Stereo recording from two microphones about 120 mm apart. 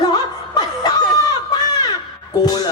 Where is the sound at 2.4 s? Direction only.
35° left (ahead or behind).